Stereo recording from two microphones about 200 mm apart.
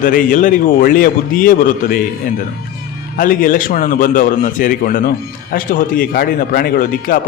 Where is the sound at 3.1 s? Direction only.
45° left (ahead or behind).